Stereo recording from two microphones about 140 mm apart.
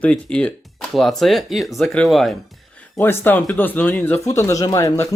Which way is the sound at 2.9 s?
15° left (ahead or behind).